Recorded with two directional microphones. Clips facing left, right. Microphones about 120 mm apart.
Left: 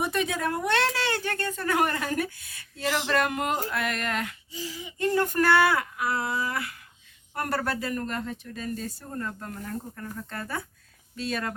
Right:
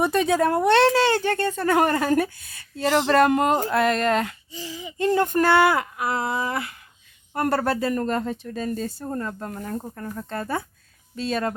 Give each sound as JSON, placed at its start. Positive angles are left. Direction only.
{"t": 0.0, "sound": "speech", "side_deg": -35}